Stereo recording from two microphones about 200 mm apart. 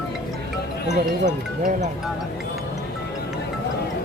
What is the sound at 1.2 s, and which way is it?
Speech, 40° right (ahead or behind).